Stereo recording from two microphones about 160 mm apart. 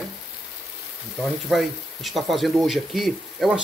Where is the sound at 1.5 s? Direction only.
Centre (ahead or behind).